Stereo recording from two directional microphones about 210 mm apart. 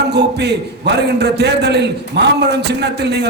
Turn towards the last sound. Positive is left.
turn(degrees=-55)  # may be behind; listen again after turning